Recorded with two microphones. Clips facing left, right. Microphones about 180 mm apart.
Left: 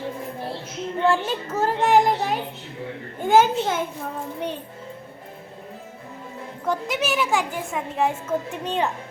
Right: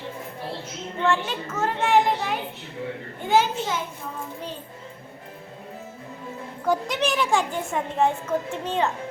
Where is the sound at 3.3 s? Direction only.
50° left (ahead or behind).